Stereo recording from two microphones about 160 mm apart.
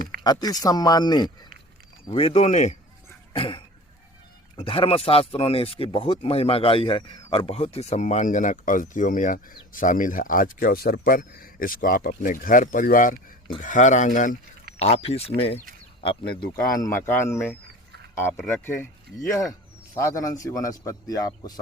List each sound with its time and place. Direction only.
0.0 s a sound: 70° right (ahead or behind)
0.3 s a man's voice: 25° left (ahead or behind)
2.0 s speech: 35° left (ahead or behind)
3.3 s a man's voice: 35° left (ahead or behind); by 14.3 s 55° left (ahead or behind)
14.8 s speech: 40° left (ahead or behind)
16.8 s a man's voice: 15° left (ahead or behind)